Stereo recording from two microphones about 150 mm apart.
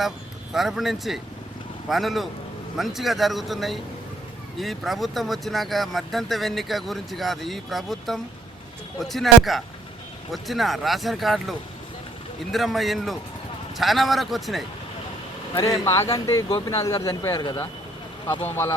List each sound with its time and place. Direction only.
0.5 s speech: centre (ahead or behind)
15.6 s speech: 25° left (ahead or behind)